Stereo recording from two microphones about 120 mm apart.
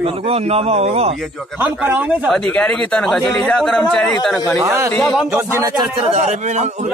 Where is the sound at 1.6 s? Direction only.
15° right (ahead or behind).